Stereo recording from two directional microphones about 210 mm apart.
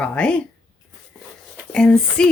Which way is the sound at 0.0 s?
5° left (ahead or behind).